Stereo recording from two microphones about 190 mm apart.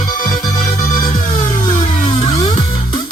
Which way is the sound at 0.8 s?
45° left (ahead or behind).